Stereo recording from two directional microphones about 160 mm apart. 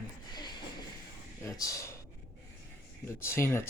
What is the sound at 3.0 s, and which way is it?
Speech, 15° left (ahead or behind).